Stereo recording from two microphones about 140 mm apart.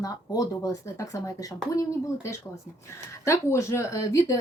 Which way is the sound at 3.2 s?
20° left (ahead or behind).